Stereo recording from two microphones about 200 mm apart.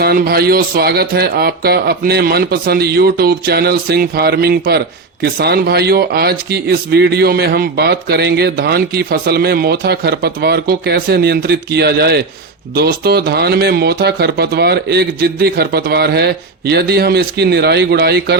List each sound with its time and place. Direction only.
0.0 s speech: 50° right (ahead or behind)